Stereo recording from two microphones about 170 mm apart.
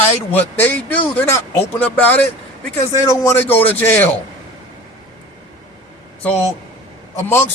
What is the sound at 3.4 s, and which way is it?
Speech, 10° left (ahead or behind).